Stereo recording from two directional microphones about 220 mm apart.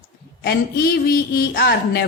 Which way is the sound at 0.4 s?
45° left (ahead or behind).